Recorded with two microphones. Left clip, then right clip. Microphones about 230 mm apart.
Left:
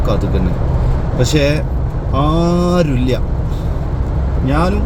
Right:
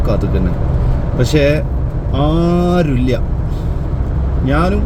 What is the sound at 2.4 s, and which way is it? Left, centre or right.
Speech, left.